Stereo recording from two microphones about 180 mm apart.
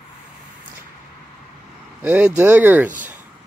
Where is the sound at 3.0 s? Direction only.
10° right (ahead or behind).